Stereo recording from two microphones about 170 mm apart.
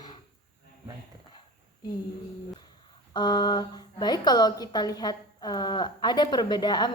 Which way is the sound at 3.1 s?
25° left (ahead or behind).